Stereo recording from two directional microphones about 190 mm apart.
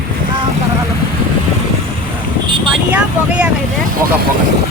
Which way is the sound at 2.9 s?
5° right (ahead or behind).